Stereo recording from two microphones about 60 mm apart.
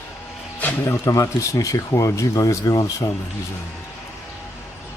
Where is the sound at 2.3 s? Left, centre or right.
Left.